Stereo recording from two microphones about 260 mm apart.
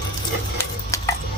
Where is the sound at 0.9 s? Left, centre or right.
Centre.